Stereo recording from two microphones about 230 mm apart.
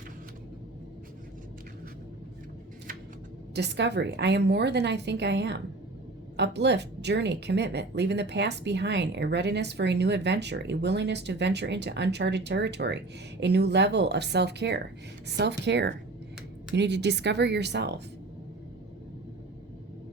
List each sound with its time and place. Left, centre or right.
3.5 s a woman's voice: right